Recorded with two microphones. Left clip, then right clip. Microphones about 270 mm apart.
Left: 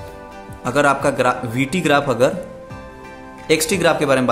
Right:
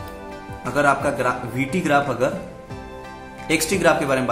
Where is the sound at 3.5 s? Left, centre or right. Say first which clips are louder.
Left 2 dB; left.